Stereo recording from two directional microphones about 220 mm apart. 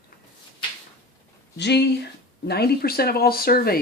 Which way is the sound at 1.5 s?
50° left (ahead or behind).